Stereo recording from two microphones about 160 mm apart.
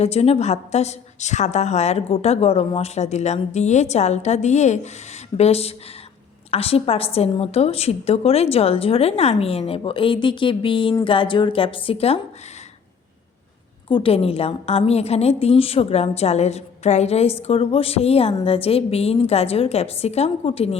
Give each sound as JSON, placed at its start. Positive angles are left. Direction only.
{"t": 0.0, "sound": "a woman's voice", "side_deg": 40}
{"t": 13.8, "sound": "a woman's voice", "side_deg": 30}